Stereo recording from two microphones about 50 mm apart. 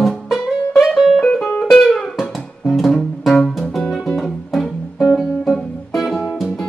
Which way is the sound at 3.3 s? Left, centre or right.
Centre.